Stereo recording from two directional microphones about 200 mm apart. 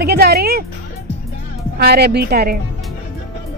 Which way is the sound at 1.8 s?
50° right (ahead or behind).